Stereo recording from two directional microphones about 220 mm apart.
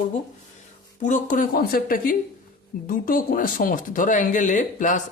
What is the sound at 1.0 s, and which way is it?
Speech, 35° left (ahead or behind).